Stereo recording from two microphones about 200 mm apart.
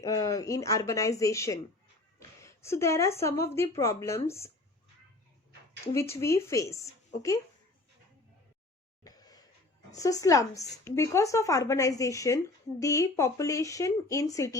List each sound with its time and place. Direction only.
0.0 s speech: 15° left (ahead or behind)
5.9 s speech: 15° left (ahead or behind)
9.0 s a sound: 20° left (ahead or behind)
9.9 s speech: 15° left (ahead or behind)